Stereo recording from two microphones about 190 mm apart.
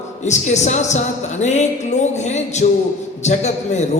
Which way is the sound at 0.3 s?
35° left (ahead or behind).